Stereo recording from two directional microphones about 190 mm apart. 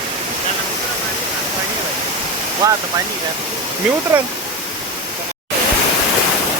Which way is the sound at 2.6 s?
20° right (ahead or behind).